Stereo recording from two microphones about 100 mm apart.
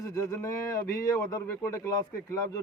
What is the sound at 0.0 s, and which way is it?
Speech, 35° left (ahead or behind).